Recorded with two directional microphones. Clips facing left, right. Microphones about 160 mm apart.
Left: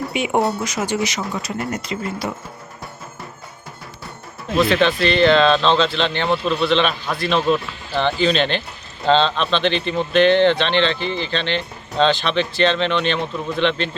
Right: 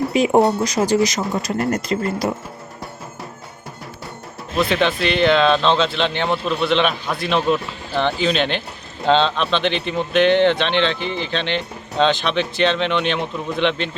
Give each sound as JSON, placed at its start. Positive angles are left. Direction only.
{"t": 0.1, "sound": "speech", "side_deg": -35}
{"t": 4.7, "sound": "speech", "side_deg": -15}